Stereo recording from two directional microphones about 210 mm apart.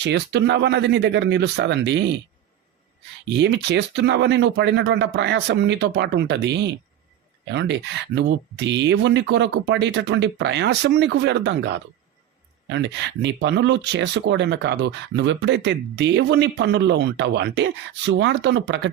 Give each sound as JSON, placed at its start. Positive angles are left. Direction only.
{"t": 0.0, "sound": "speech", "side_deg": -55}
{"t": 3.3, "sound": "speech", "side_deg": -55}